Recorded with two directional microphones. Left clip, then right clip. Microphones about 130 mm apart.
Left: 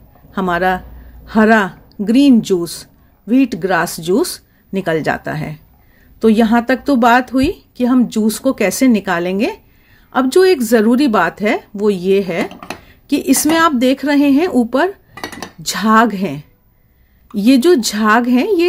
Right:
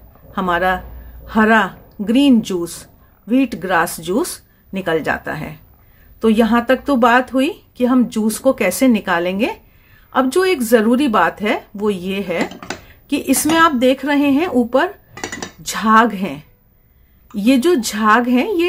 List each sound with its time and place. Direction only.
0.3 s a woman's voice: 35° left (ahead or behind)